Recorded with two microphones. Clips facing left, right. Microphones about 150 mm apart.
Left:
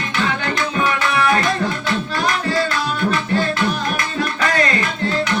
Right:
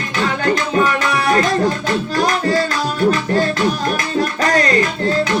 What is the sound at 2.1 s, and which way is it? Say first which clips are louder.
Music: right 5 dB; 40° right (ahead or behind).